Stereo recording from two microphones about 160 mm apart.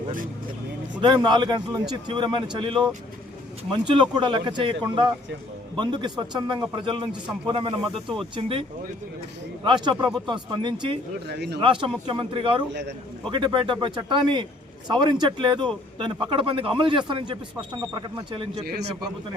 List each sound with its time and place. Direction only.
0.9 s speech: 30° right (ahead or behind)
9.6 s speech: 30° right (ahead or behind)
11.3 s speech: 90° right
11.6 s speech: 30° right (ahead or behind)
18.6 s a man's voice: 75° right (ahead or behind)